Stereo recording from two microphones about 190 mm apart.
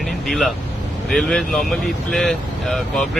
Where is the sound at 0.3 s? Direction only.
Centre (ahead or behind).